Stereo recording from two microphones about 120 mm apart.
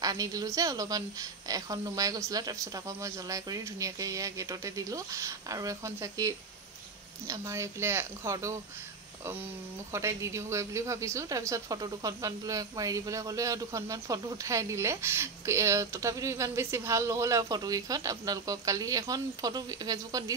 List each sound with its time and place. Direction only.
0.0 s a woman's voice: 30° right (ahead or behind)
9.9 s speech: 25° right (ahead or behind)